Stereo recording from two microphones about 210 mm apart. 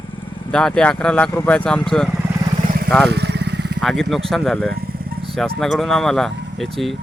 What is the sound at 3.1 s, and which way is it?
Motorcycle, 50° right (ahead or behind).